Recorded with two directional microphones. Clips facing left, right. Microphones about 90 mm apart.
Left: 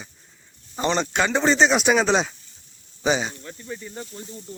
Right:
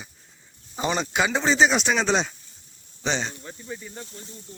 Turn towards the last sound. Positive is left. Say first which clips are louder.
# left 2 dB
turn(degrees=-10)  # may be behind; listen again after turning